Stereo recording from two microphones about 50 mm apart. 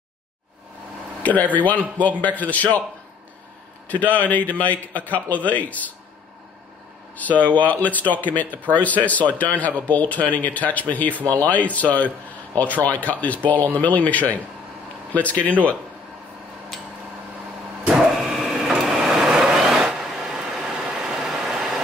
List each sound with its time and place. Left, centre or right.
1.2 s speech: left
3.9 s speech: left
7.2 s speech: left
17.8 s printer: centre
19.5 s vehicle: centre